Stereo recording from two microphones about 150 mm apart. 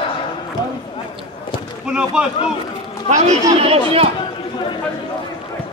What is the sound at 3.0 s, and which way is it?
Speech, 50° right (ahead or behind).